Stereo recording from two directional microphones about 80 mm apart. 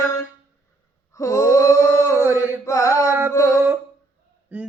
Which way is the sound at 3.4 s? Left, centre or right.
Centre.